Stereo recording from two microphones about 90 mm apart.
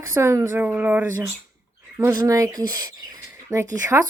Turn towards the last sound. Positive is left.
turn(degrees=-35)  # may be behind; listen again after turning